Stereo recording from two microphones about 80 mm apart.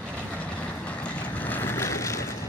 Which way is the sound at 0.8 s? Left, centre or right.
Centre.